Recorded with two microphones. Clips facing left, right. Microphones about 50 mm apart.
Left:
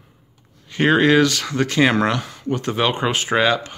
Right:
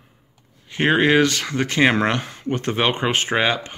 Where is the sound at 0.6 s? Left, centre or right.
Centre.